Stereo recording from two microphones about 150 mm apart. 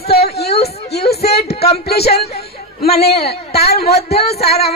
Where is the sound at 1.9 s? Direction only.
90° left.